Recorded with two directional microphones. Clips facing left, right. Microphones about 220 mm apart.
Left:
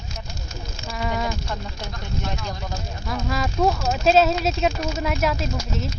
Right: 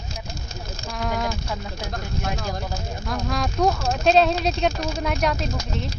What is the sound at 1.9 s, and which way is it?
Speech, 50° right (ahead or behind).